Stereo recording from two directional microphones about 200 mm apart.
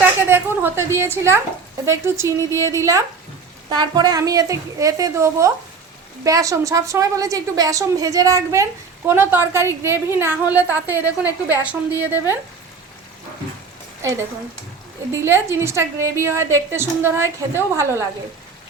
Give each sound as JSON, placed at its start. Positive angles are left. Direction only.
{"t": 0.0, "sound": "a sound", "side_deg": -10}
{"t": 1.8, "sound": "a woman's voice", "side_deg": -15}
{"t": 14.0, "sound": "a woman's voice", "side_deg": -15}